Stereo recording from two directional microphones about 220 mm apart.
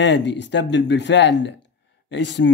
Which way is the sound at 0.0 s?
55° left (ahead or behind).